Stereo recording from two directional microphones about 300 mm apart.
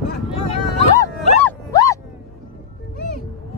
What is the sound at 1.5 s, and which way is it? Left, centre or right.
Dog, centre.